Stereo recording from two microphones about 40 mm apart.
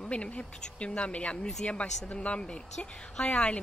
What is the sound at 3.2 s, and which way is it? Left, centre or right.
Speech, left.